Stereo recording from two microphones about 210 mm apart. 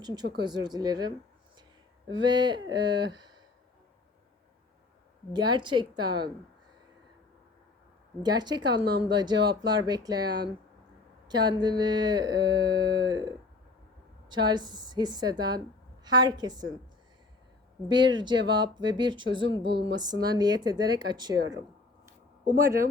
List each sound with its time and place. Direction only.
0.3 s speech: 20° right (ahead or behind)
5.3 s speech: 20° right (ahead or behind)
8.2 s speech: 20° right (ahead or behind)
17.8 s speech: 20° right (ahead or behind)